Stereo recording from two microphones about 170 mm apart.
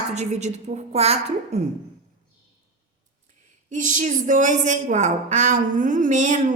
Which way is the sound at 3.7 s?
50° right (ahead or behind).